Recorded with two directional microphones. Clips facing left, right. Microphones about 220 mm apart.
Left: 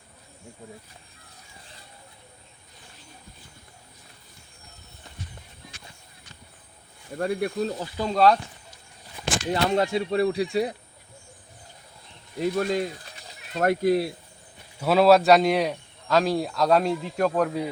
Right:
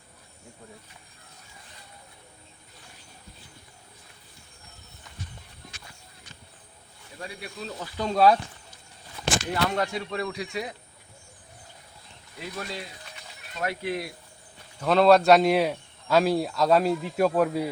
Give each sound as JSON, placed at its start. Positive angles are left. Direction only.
{"t": 7.2, "sound": "speech", "side_deg": 55}
{"t": 7.9, "sound": "speech", "side_deg": 0}
{"t": 9.5, "sound": "speech", "side_deg": 25}
{"t": 12.4, "sound": "speech", "side_deg": 45}
{"t": 14.8, "sound": "speech", "side_deg": 5}